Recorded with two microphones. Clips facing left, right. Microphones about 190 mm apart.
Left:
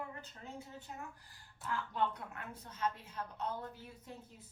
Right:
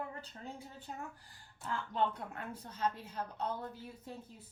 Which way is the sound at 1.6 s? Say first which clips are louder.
Right 2 dB; 30° right (ahead or behind).